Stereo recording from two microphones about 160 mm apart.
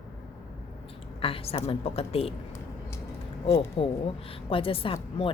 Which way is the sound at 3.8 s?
35° left (ahead or behind).